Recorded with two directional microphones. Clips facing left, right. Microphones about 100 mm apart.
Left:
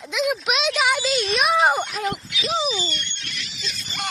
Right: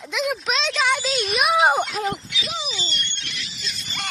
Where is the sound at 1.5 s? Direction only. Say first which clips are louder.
Right 2 dB; 15° right (ahead or behind).